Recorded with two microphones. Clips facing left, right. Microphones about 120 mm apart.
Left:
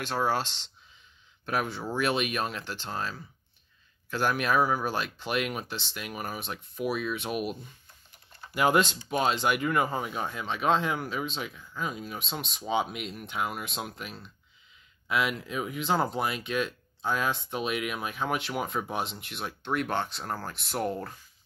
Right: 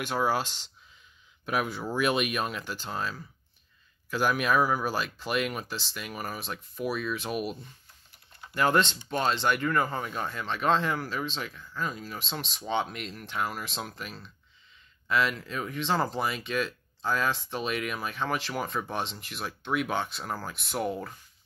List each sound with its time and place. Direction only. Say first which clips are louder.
0.0 s speech: right 1 dB; 10° right (ahead or behind)
8.5 s speech: left 1 dB; 10° left (ahead or behind)